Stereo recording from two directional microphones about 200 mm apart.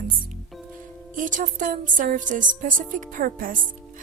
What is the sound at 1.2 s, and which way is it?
A woman's voice, 40° right (ahead or behind).